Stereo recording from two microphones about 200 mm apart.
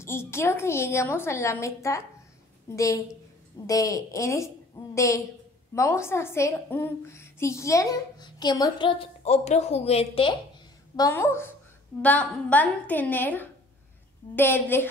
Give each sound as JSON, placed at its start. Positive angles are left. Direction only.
{"t": 0.0, "sound": "a woman's voice", "side_deg": 10}
{"t": 11.0, "sound": "a woman's voice", "side_deg": 15}